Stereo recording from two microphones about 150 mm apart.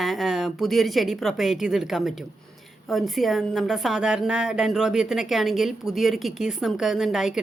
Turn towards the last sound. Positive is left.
turn(degrees=-5)  # may be behind; listen again after turning